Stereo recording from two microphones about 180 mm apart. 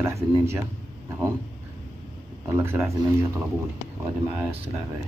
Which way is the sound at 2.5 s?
15° right (ahead or behind).